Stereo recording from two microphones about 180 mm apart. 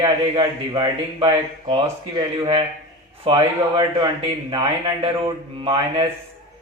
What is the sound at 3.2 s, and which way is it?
A man's voice, 25° right (ahead or behind).